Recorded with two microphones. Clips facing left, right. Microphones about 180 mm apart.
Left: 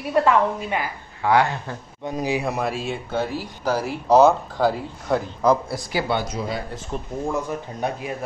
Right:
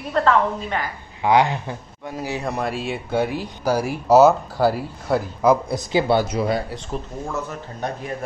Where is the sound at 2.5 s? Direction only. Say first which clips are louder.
Even; centre (ahead or behind).